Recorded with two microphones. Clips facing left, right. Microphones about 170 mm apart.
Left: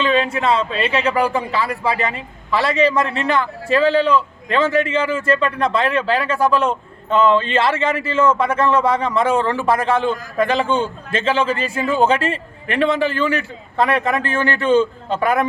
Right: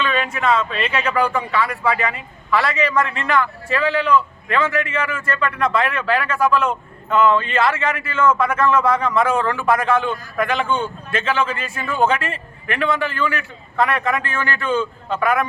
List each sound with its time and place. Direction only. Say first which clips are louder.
0.0 s a man's voice: left 3 dB; 30° left (ahead or behind)